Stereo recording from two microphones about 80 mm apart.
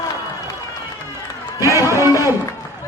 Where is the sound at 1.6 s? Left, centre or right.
Right.